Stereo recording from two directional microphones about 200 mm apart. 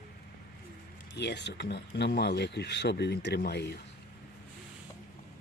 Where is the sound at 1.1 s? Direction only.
55° left (ahead or behind).